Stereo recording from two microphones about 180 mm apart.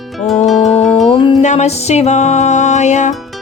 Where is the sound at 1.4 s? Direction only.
40° left (ahead or behind).